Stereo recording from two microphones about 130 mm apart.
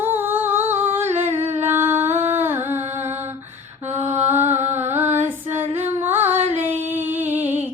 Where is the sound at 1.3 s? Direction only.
50° right (ahead or behind).